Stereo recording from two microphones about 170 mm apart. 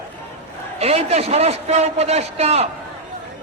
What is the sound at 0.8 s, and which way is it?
A man's voice, 40° right (ahead or behind).